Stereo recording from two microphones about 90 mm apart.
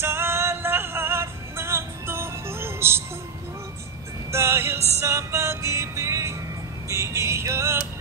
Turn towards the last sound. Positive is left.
turn(degrees=-30)  # may be behind; listen again after turning